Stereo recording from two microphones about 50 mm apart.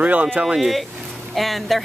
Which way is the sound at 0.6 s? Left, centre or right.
Centre.